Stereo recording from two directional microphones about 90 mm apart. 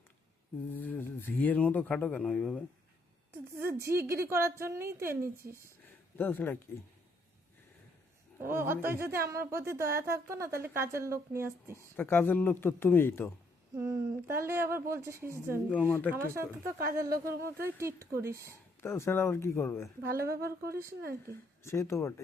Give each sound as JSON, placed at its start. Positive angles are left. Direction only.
{"t": 0.7, "sound": "speech", "side_deg": 20}
{"t": 3.3, "sound": "speech", "side_deg": -25}
{"t": 6.1, "sound": "speech", "side_deg": 20}
{"t": 8.4, "sound": "speech", "side_deg": -25}
{"t": 11.8, "sound": "speech", "side_deg": 25}
{"t": 13.7, "sound": "speech", "side_deg": -30}
{"t": 15.7, "sound": "speech", "side_deg": 20}
{"t": 16.1, "sound": "speech", "side_deg": -30}
{"t": 18.8, "sound": "speech", "side_deg": 30}
{"t": 20.0, "sound": "speech", "side_deg": -35}
{"t": 21.2, "sound": "speech", "side_deg": 30}